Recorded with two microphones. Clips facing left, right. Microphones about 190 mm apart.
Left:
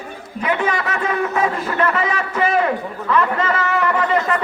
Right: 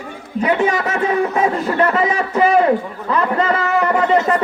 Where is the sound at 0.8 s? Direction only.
30° right (ahead or behind).